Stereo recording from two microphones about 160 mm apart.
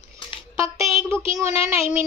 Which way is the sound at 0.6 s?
20° right (ahead or behind).